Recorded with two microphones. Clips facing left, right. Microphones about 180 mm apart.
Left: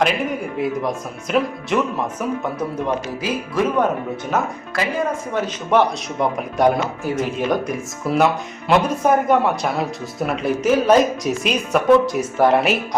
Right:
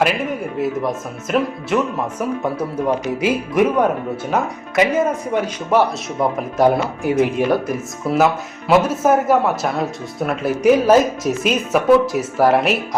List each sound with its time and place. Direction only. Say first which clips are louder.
0.6 s speech: right 2 dB; centre (ahead or behind)
3.2 s speech: right 6 dB; 20° right (ahead or behind)
5.7 s speech: right 1 dB; 5° right (ahead or behind)